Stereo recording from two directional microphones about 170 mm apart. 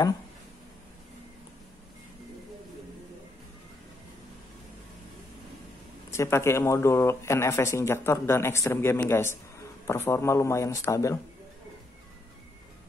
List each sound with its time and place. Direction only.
6.1 s speech: 15° left (ahead or behind)